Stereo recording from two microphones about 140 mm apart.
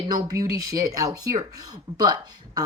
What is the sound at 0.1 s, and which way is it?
Speech, 25° right (ahead or behind).